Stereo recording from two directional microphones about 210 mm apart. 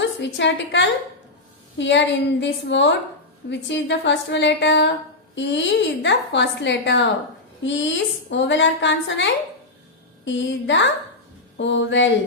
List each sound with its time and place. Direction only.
0.0 s a woman's voice: 60° left (ahead or behind)